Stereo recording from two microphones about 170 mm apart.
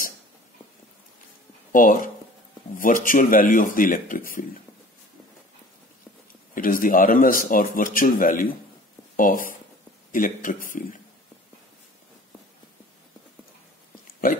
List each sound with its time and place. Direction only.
1.7 s a man's voice: 50° left (ahead or behind)
6.5 s a man's voice: 55° left (ahead or behind)